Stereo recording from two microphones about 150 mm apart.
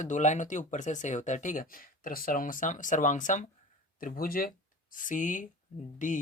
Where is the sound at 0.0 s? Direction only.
55° left (ahead or behind).